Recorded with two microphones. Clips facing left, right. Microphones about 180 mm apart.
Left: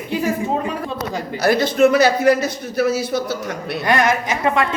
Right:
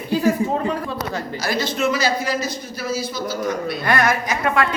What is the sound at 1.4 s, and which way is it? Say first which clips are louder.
A man's voice: left 9 dB; 55° left (ahead or behind).